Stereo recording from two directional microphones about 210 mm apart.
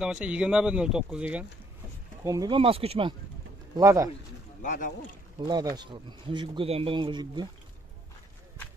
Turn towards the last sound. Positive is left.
turn(degrees=-20)  # may be behind; listen again after turning